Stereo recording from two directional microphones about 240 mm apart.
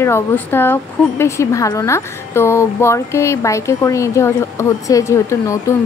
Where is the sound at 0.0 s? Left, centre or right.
Centre.